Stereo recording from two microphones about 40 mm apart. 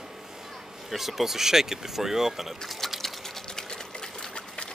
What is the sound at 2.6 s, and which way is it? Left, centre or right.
Speech, centre.